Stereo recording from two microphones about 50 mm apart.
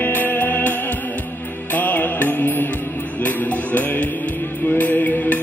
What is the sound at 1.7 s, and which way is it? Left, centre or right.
Music, left.